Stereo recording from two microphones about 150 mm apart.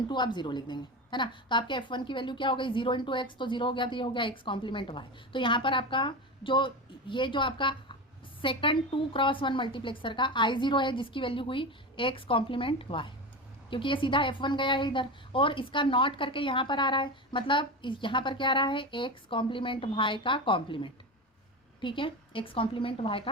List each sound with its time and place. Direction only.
0.1 s a woman's voice: 30° left (ahead or behind)